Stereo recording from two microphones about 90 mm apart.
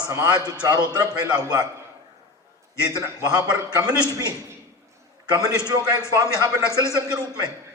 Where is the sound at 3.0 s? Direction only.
45° right (ahead or behind).